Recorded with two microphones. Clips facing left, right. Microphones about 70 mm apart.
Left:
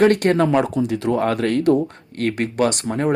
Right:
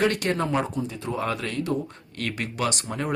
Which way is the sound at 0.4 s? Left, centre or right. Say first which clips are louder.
Left 8 dB; left.